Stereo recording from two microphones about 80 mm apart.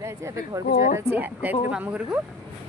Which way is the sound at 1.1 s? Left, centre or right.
Right.